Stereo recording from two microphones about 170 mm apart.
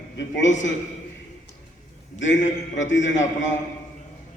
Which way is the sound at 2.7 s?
90° left.